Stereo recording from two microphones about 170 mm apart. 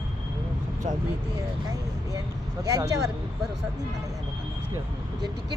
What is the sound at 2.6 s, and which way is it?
Speech, 20° right (ahead or behind).